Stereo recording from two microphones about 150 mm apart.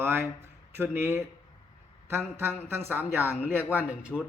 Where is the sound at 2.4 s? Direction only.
15° right (ahead or behind).